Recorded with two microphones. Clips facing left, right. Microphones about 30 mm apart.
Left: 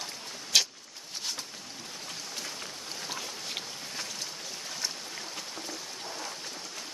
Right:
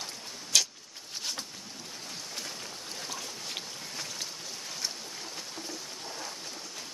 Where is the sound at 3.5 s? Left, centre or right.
Centre.